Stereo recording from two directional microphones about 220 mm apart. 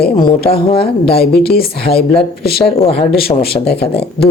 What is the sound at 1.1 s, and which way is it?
Speech, 45° left (ahead or behind).